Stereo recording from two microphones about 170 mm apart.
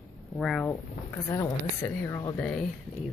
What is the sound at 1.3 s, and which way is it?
A woman's voice, 15° left (ahead or behind).